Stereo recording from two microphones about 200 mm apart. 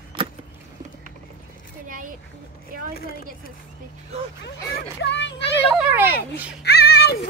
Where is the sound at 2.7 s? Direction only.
45° right (ahead or behind).